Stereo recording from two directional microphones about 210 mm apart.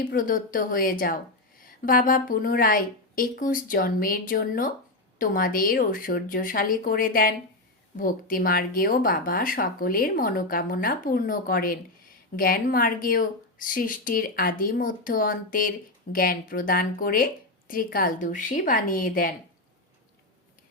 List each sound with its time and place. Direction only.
0.0 s speech: 40° left (ahead or behind)